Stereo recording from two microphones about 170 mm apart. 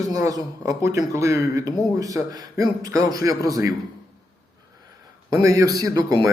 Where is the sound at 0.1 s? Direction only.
20° right (ahead or behind).